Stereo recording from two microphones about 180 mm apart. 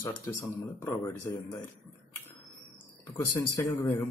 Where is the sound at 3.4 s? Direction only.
15° left (ahead or behind).